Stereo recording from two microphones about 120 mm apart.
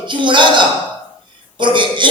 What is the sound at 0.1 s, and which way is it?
Speech, 40° right (ahead or behind).